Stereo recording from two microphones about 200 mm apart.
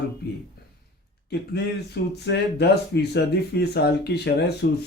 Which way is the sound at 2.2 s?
55° left (ahead or behind).